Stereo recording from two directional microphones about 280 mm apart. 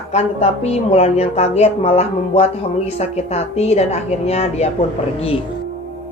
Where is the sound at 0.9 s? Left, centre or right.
Left.